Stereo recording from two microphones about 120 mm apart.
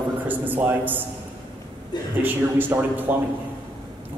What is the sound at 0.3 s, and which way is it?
Speech, 15° right (ahead or behind).